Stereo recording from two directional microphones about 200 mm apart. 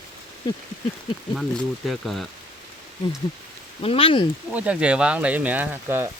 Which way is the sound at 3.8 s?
25° left (ahead or behind).